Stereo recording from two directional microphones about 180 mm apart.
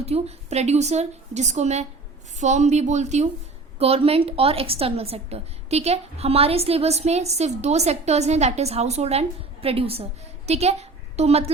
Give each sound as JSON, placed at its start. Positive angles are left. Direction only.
{"t": 0.0, "sound": "a woman's voice", "side_deg": -35}